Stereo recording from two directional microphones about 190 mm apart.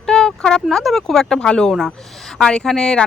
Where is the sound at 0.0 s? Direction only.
5° left (ahead or behind).